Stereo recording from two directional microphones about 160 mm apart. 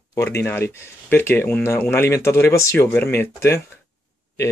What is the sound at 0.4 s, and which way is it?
Speech, 15° left (ahead or behind).